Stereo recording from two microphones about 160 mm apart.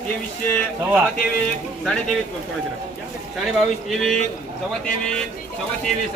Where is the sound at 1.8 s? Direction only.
5° left (ahead or behind).